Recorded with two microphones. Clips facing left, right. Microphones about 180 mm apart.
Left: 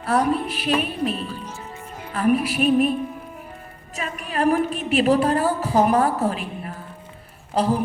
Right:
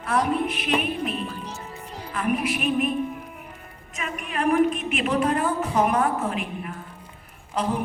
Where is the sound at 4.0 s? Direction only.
35° left (ahead or behind).